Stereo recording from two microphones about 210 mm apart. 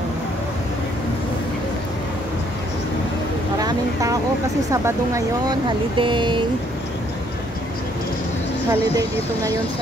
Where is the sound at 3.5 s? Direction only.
15° right (ahead or behind).